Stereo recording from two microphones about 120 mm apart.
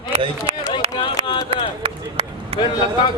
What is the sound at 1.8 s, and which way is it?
Run, 50° right (ahead or behind).